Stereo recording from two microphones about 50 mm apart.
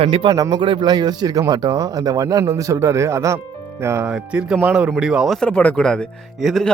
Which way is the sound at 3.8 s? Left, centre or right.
Right.